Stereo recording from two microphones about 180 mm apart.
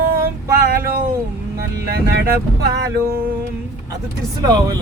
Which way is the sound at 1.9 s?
60° right (ahead or behind).